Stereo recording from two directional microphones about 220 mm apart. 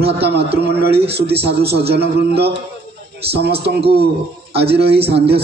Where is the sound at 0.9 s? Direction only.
25° right (ahead or behind).